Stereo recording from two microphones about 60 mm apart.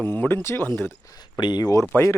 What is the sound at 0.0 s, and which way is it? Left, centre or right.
Speech, left.